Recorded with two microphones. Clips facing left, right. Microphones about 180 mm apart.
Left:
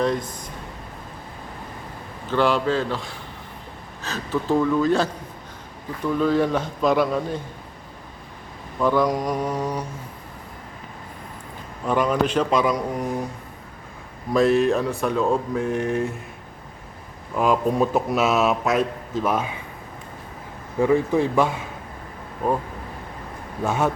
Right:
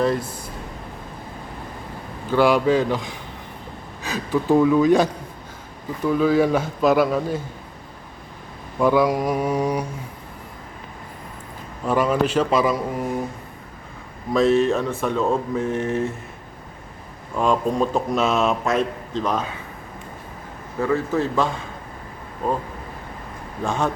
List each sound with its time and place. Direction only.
0.0 s a sound: 5° right (ahead or behind)
2.3 s speech: 10° right (ahead or behind)
6.1 s a man's voice: 5° right (ahead or behind)
8.8 s speech: 10° right (ahead or behind)
11.9 s a man's voice: 5° right (ahead or behind)
14.3 s a man's voice: centre (ahead or behind)
17.3 s a man's voice: 5° left (ahead or behind)
20.7 s speech: 15° left (ahead or behind)
23.6 s speech: 5° left (ahead or behind)